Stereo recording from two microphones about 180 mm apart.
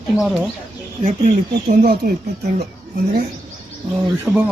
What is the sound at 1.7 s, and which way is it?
Speech, 55° right (ahead or behind).